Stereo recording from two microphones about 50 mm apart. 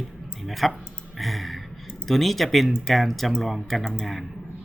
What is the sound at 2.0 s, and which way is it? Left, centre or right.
Speech, centre.